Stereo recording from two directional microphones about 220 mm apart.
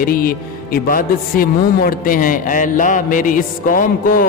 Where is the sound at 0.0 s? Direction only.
40° left (ahead or behind).